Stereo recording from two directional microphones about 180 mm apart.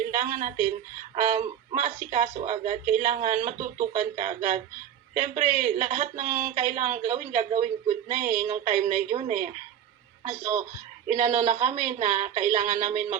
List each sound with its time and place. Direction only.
0.1 s a woman's voice: 45° right (ahead or behind)